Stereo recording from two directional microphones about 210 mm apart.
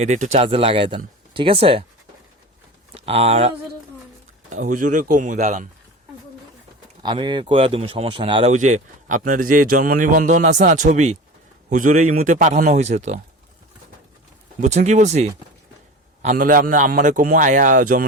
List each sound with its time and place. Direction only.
0.0 s speech: 35° right (ahead or behind)
2.9 s speech: 30° right (ahead or behind)
4.5 s speech: 40° right (ahead or behind)
7.0 s speech: 20° right (ahead or behind)
14.6 s speech: 35° right (ahead or behind)